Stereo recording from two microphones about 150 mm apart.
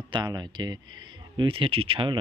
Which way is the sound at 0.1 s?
30° right (ahead or behind).